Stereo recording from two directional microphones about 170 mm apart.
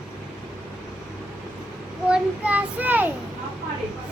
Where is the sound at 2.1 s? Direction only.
10° right (ahead or behind).